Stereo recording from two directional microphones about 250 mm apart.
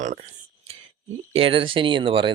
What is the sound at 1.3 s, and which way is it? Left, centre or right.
Speech, right.